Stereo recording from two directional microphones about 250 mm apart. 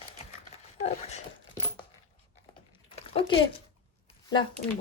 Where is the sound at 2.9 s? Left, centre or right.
Left.